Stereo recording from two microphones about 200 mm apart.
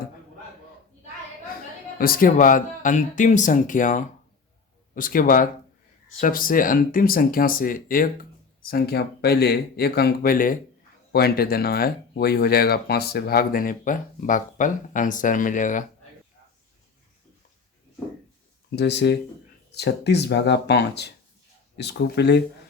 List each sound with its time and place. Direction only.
2.0 s speech: 45° left (ahead or behind)
18.8 s speech: 60° left (ahead or behind)